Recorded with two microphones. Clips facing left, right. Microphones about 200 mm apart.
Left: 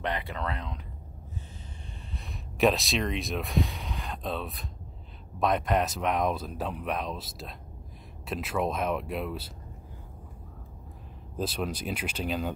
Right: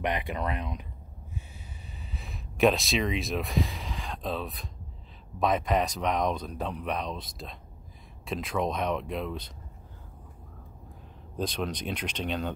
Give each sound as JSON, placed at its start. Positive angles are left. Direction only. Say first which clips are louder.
{"t": 0.0, "sound": "speech", "louder": "right 2 dB", "side_deg": -15}
{"t": 2.1, "sound": "speech", "louder": "right 1 dB", "side_deg": 0}
{"t": 11.3, "sound": "speech", "louder": "even", "side_deg": 5}